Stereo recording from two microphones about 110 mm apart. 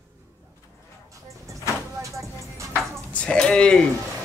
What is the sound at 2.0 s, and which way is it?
Music, 30° right (ahead or behind).